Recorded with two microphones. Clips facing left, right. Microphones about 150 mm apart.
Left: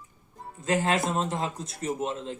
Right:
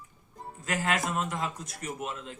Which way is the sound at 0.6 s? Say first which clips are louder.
Left 5 dB; 25° left (ahead or behind).